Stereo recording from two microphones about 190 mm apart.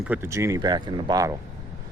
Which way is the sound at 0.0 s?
10° right (ahead or behind).